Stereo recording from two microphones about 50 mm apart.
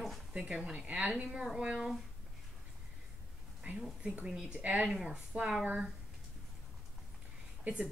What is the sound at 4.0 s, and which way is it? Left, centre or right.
Speech, right.